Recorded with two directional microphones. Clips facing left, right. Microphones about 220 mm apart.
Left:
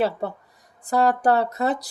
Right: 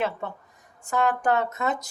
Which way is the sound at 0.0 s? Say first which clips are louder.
Left 5 dB; 35° left (ahead or behind).